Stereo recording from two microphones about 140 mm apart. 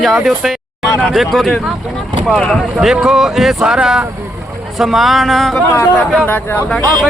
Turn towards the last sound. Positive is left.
turn(degrees=5)  # may be behind; listen again after turning